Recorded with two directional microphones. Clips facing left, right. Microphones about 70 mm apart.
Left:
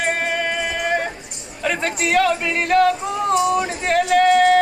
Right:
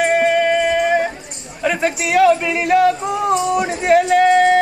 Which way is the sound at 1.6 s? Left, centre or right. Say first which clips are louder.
Right 3 dB; centre.